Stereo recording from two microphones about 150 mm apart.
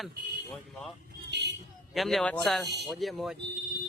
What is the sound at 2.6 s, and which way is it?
Speech, 90° right.